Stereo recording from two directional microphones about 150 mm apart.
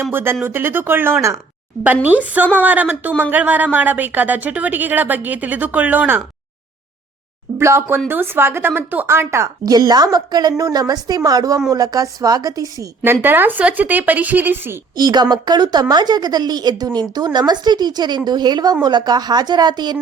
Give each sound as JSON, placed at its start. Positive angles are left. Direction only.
{"t": 0.0, "sound": "a woman's voice", "side_deg": -15}
{"t": 7.6, "sound": "a woman's voice", "side_deg": -20}
{"t": 13.2, "sound": "a woman's voice", "side_deg": -15}
{"t": 14.9, "sound": "a woman's voice", "side_deg": -30}